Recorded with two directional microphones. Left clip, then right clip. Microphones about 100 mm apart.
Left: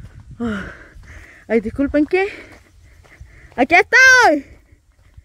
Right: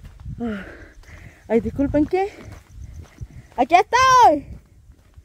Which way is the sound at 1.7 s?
35° left (ahead or behind).